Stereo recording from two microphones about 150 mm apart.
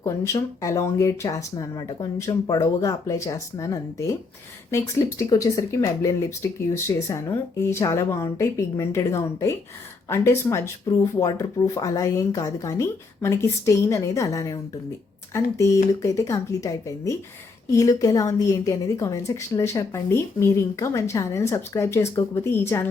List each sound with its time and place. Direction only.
0.0 s a woman's voice: 20° left (ahead or behind)